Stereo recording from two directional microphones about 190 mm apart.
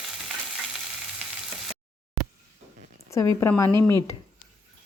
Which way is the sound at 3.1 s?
15° left (ahead or behind).